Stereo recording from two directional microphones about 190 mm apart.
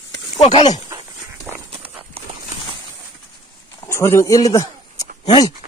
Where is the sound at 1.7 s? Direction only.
30° right (ahead or behind).